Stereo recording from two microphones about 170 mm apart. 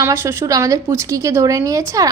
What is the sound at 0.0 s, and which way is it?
A woman's voice, 15° right (ahead or behind).